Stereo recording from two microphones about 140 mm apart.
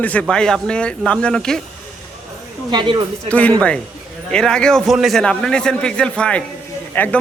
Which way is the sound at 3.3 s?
10° left (ahead or behind).